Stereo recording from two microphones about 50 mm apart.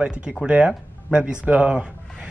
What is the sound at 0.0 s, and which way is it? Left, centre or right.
A man's voice, centre.